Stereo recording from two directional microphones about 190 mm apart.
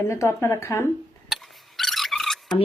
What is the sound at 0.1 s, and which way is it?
Speech, 15° left (ahead or behind).